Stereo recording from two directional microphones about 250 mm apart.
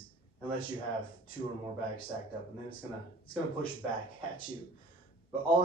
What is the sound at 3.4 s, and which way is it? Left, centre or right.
Speech, left.